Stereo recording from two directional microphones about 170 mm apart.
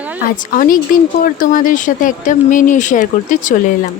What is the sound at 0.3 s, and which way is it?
A woman's voice, 50° left (ahead or behind).